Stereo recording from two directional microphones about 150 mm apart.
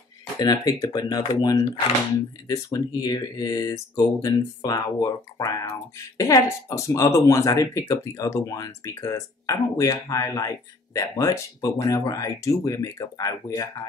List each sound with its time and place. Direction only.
0.4 s speech: 25° left (ahead or behind)